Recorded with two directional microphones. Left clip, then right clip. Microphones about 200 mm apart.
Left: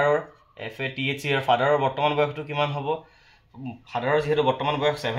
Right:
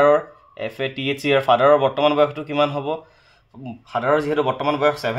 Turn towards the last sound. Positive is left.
turn(degrees=-45)  # may be behind; listen again after turning